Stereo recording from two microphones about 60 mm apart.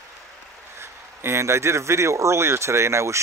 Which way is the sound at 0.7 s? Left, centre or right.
Right.